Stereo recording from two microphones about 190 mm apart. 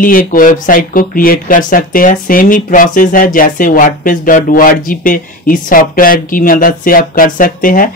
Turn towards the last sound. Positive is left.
turn(degrees=50)  # may be behind; listen again after turning